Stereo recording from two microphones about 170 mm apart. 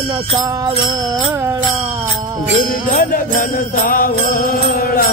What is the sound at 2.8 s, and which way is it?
Jingle bell, 55° left (ahead or behind).